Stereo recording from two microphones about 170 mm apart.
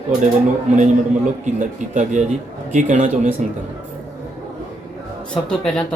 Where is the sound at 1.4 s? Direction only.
45° right (ahead or behind).